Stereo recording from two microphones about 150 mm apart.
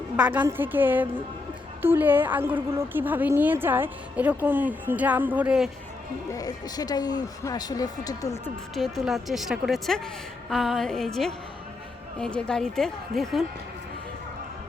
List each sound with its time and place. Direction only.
0.2 s a woman's voice: 10° right (ahead or behind)
6.3 s speech: 25° left (ahead or behind)
8.4 s speech: centre (ahead or behind)